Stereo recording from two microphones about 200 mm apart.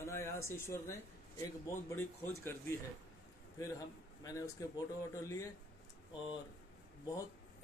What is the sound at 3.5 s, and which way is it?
A man's voice, 15° left (ahead or behind).